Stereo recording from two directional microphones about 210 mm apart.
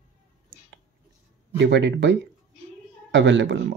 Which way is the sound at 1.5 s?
55° right (ahead or behind).